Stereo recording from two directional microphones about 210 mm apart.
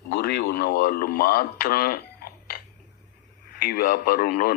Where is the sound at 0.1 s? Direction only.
50° left (ahead or behind).